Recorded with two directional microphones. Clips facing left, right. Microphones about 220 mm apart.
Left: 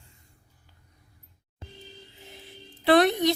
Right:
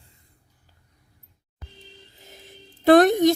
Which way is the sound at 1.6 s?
25° left (ahead or behind).